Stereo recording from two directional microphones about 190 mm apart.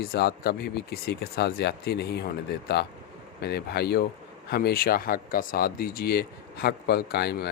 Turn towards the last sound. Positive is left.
turn(degrees=60)  # may be behind; listen again after turning